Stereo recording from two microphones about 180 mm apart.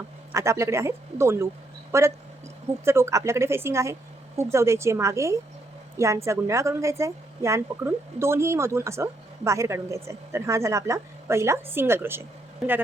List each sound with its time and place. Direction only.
0.3 s a woman's voice: 15° right (ahead or behind)